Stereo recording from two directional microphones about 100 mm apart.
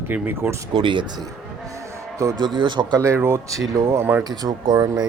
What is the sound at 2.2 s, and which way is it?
Speech, 30° right (ahead or behind).